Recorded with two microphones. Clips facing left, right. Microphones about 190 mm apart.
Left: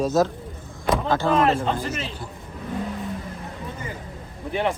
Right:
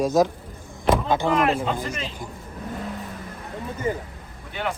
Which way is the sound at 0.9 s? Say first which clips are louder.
Right 1 dB; 15° right (ahead or behind).